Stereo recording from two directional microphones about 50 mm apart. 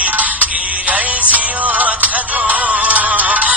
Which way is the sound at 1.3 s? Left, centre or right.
Right.